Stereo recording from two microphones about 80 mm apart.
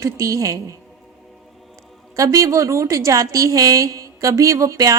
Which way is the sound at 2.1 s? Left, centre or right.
Right.